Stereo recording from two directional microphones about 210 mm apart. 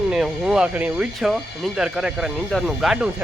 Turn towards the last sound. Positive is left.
turn(degrees=-5)  # may be behind; listen again after turning